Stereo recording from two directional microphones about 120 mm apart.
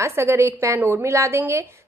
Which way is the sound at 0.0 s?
25° right (ahead or behind).